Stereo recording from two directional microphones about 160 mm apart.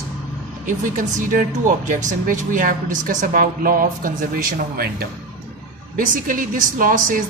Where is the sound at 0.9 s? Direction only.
55° right (ahead or behind).